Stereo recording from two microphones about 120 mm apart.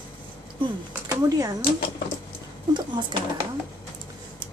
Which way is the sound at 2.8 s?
40° right (ahead or behind).